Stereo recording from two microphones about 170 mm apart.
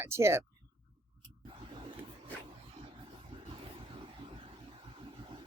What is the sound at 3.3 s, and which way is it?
Vehicle, 35° right (ahead or behind).